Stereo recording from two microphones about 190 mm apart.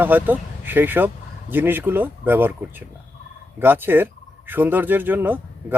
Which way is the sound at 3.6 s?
10° right (ahead or behind).